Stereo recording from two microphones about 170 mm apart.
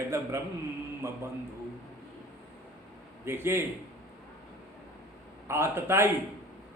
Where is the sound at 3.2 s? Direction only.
15° right (ahead or behind).